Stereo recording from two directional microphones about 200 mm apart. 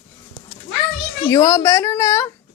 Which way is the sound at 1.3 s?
15° left (ahead or behind).